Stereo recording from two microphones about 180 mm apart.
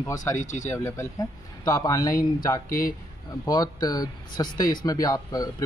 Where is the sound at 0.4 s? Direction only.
45° left (ahead or behind).